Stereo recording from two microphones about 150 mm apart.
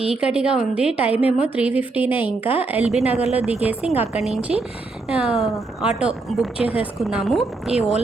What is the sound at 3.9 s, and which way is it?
Speech, 45° left (ahead or behind).